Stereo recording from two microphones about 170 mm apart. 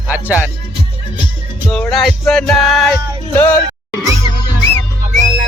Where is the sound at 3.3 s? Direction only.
10° left (ahead or behind).